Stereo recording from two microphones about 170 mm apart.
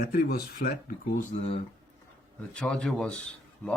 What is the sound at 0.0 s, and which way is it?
Speech, 65° left (ahead or behind).